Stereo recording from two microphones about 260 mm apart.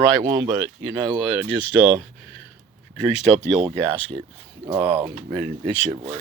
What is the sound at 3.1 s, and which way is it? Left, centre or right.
Speech, left.